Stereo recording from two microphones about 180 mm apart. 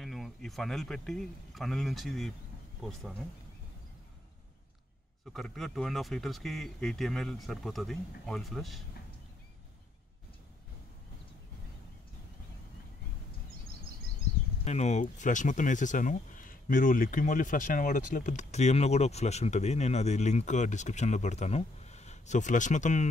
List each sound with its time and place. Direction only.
0.0 s a man's voice: centre (ahead or behind)
5.3 s speech: centre (ahead or behind)
14.6 s speech: 40° left (ahead or behind)